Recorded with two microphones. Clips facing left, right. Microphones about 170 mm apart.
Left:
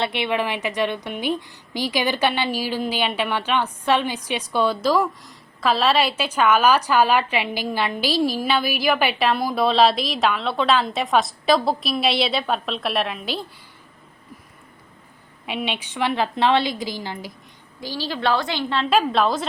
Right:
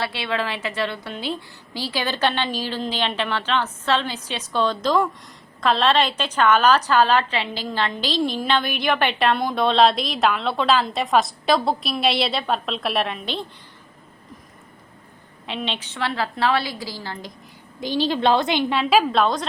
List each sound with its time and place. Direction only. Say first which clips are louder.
0.0 s a woman's voice: left 3 dB; 20° left (ahead or behind); by 13.4 s 5° left (ahead or behind)
15.4 s a woman's voice: left 2 dB; 10° left (ahead or behind)
17.7 s a woman's voice: right 6 dB; 20° right (ahead or behind); by 19.5 s centre (ahead or behind)